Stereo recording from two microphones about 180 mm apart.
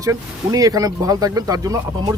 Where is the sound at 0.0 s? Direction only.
20° right (ahead or behind).